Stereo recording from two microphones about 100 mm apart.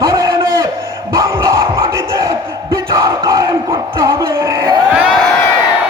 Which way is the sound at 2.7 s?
35° right (ahead or behind).